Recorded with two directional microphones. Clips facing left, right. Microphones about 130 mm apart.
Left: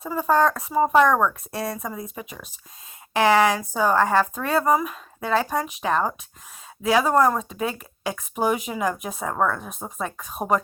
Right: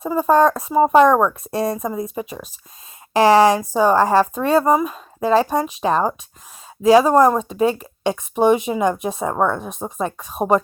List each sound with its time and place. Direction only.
0.1 s speech: 30° right (ahead or behind)